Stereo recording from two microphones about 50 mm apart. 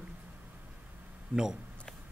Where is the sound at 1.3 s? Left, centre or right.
Right.